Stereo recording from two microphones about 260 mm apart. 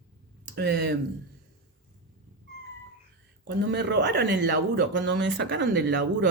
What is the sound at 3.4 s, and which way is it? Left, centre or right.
Speech, right.